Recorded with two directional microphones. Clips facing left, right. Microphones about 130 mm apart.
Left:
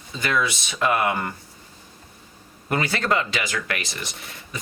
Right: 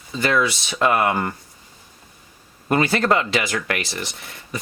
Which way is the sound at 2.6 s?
30° right (ahead or behind).